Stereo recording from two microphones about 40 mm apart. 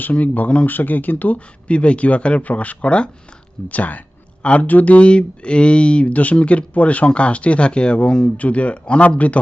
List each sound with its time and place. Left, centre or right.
0.0 s speech: left
0.7 s speech: left
1.4 s speech: left
3.7 s speech: left
8.4 s speech: left